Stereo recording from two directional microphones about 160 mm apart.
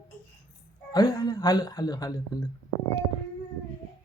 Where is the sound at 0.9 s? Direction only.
20° left (ahead or behind).